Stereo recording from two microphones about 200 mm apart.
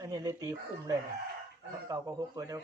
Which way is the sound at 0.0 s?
15° right (ahead or behind).